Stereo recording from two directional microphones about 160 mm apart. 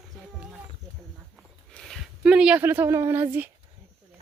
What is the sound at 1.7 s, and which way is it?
Speech, centre (ahead or behind).